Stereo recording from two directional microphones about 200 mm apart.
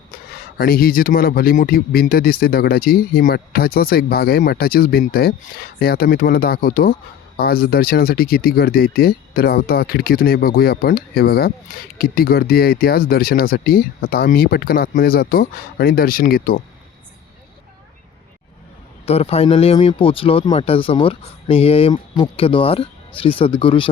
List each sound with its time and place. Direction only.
0.1 s speech: 45° left (ahead or behind)
19.0 s speech: 30° left (ahead or behind)